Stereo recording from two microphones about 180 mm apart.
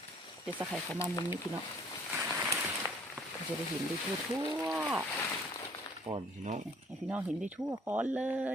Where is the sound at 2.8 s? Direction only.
15° right (ahead or behind).